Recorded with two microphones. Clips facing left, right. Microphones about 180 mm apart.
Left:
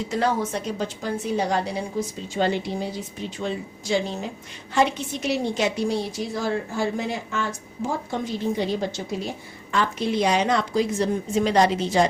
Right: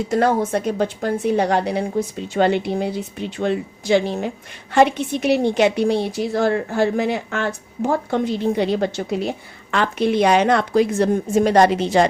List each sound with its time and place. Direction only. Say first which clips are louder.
0.1 s a woman's voice: right 6 dB; 50° right (ahead or behind)